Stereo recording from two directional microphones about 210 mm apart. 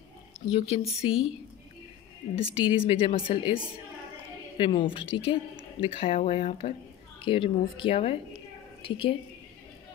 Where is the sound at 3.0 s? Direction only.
25° left (ahead or behind).